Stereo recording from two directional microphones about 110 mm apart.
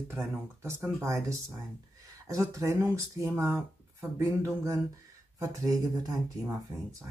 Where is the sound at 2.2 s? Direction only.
30° right (ahead or behind).